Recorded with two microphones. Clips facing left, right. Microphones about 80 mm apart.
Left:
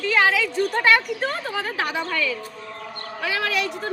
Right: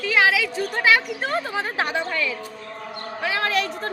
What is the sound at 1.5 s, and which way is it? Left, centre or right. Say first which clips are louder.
Speech: right 1 dB; right.